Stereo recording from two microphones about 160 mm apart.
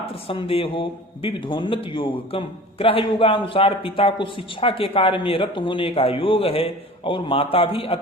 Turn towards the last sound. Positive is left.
turn(degrees=35)  # may be behind; listen again after turning